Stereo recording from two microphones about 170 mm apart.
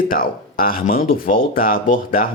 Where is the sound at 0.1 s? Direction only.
55° left (ahead or behind).